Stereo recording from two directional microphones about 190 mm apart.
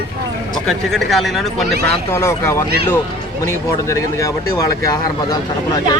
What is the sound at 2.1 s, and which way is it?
Speech, 15° left (ahead or behind).